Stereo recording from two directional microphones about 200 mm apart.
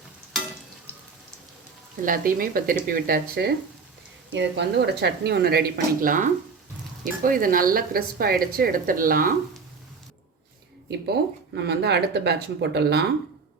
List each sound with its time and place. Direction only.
2.0 s a woman's voice: 45° right (ahead or behind)
11.0 s speech: 55° right (ahead or behind)